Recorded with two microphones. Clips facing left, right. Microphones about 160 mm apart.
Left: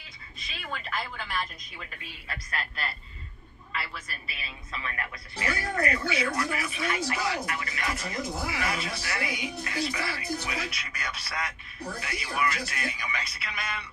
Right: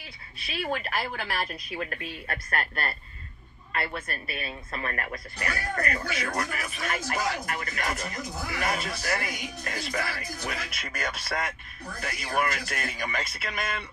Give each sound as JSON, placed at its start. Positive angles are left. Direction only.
{"t": 0.4, "sound": "a woman's voice", "side_deg": -65}